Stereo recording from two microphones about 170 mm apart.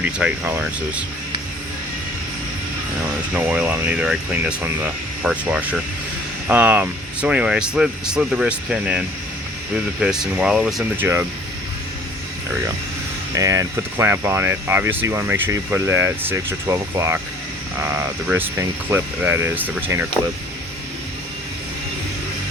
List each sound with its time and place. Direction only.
0.0 s speech: 10° right (ahead or behind)
3.3 s speech: 5° right (ahead or behind)
10.9 s speech: 10° right (ahead or behind)
13.3 s speech: 20° right (ahead or behind)